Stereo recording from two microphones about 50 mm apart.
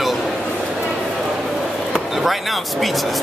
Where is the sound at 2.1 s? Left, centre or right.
Centre.